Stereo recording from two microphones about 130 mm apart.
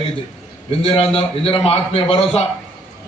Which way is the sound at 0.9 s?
50° left (ahead or behind).